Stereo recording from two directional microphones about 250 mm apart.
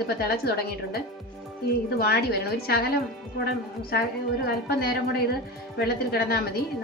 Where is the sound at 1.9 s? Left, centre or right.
Left.